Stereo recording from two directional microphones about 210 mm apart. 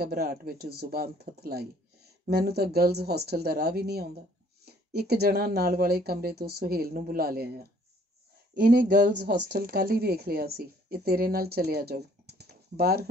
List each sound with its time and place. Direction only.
0.0 s a woman's voice: 45° right (ahead or behind)